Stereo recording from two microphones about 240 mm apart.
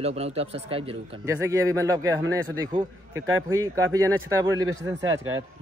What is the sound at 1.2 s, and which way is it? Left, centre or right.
A man's voice, centre.